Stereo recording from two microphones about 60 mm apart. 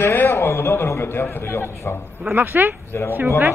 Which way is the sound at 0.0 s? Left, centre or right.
Left.